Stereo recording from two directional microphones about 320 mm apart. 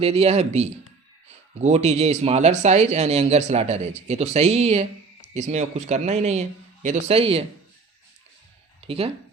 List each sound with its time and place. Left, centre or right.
0.0 s speech: centre
8.8 s speech: centre